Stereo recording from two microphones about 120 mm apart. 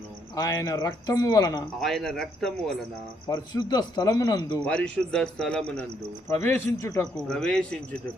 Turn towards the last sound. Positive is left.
turn(degrees=5)  # may be behind; listen again after turning